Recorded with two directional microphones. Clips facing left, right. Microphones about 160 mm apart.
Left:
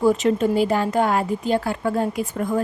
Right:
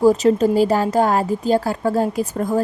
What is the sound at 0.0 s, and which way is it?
Speech, 40° right (ahead or behind).